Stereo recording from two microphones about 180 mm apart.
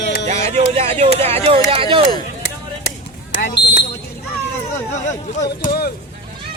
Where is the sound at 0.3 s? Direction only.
35° right (ahead or behind).